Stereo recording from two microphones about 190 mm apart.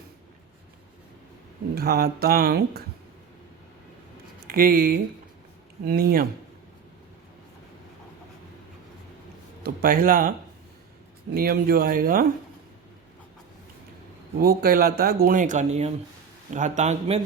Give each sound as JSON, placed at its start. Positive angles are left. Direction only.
{"t": 1.7, "sound": "speech", "side_deg": -55}
{"t": 4.4, "sound": "speech", "side_deg": -50}
{"t": 9.6, "sound": "speech", "side_deg": -50}
{"t": 11.3, "sound": "speech", "side_deg": -50}
{"t": 14.3, "sound": "a man's voice", "side_deg": -50}